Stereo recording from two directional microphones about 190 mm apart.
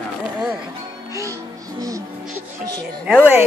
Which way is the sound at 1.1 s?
15° right (ahead or behind).